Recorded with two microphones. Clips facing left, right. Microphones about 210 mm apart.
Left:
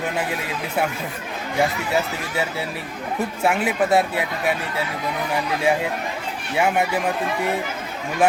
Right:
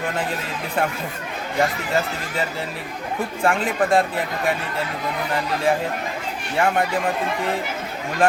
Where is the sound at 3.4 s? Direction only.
5° left (ahead or behind).